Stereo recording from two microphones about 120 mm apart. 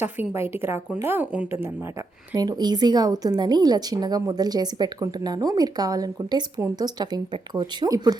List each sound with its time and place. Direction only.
0.0 s a woman's voice: 20° right (ahead or behind)
2.3 s a woman's voice: 35° right (ahead or behind)